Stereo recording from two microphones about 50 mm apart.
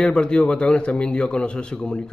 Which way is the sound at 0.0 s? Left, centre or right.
Centre.